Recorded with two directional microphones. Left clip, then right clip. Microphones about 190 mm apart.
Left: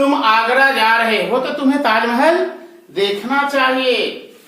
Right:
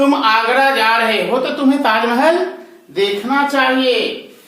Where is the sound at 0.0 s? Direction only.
20° right (ahead or behind).